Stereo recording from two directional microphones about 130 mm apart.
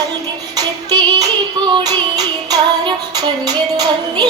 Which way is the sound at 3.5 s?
30° right (ahead or behind).